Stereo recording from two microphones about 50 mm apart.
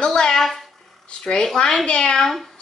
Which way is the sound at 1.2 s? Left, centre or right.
Centre.